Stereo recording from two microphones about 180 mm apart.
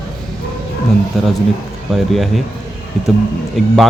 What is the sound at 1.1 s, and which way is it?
Speech, centre (ahead or behind).